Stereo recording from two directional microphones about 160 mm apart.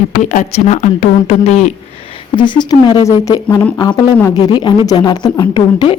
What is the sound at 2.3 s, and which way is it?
A woman's voice, 30° left (ahead or behind).